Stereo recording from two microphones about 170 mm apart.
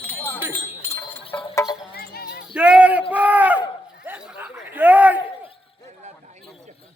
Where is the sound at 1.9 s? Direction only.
65° left (ahead or behind).